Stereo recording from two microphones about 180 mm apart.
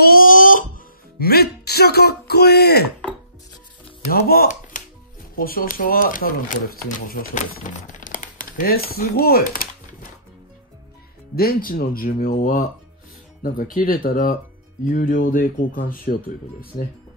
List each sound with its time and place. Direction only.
0.0 s crying: 50° left (ahead or behind)
1.2 s speech: 60° left (ahead or behind)
4.7 s music: 45° left (ahead or behind)
5.3 s speech: 55° left (ahead or behind)
11.3 s speech: 55° left (ahead or behind)